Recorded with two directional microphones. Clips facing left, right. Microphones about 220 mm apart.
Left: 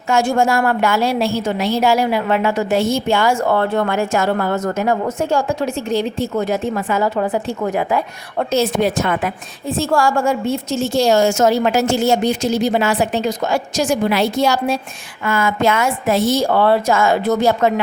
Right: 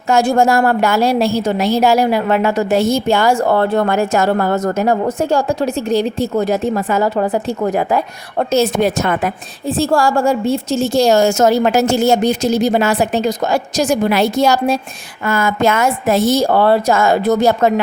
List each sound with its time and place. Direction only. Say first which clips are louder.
0.1 s a woman's voice: right 3 dB; 35° right (ahead or behind)